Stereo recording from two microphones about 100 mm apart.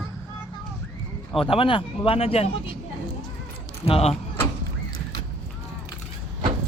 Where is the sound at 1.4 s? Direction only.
65° left (ahead or behind); by 2.4 s 80° left.